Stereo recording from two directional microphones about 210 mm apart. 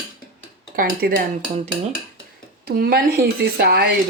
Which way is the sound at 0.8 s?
45° right (ahead or behind).